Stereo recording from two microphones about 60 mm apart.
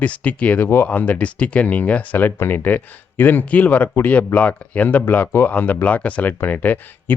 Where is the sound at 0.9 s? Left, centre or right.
Left.